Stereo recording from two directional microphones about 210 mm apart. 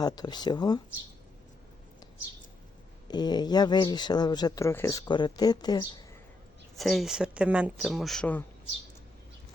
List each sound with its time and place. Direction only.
0.0 s speech: 20° left (ahead or behind)
3.1 s speech: 20° left (ahead or behind)
6.7 s speech: centre (ahead or behind)